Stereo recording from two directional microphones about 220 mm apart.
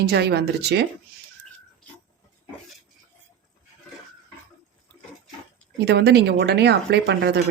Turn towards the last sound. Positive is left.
turn(degrees=-50)  # may be behind; listen again after turning